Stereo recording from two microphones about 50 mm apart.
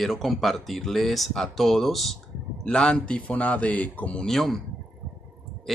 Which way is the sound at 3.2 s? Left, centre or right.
Left.